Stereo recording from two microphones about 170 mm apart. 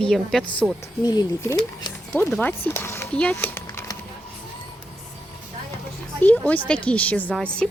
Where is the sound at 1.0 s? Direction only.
25° left (ahead or behind).